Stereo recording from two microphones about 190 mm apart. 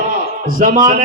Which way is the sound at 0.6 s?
45° right (ahead or behind).